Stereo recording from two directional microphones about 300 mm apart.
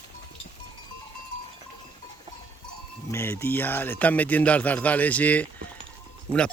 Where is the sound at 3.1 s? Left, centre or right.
Centre.